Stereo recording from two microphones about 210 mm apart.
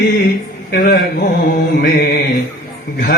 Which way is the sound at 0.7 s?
45° left (ahead or behind).